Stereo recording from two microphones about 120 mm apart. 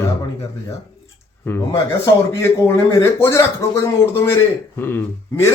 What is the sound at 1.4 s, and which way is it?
Speech, 20° left (ahead or behind).